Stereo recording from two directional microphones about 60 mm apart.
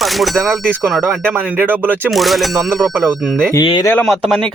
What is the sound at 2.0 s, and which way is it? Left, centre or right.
Speech, centre.